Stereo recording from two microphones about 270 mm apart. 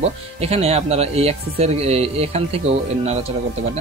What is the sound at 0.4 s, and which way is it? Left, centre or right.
Speech, right.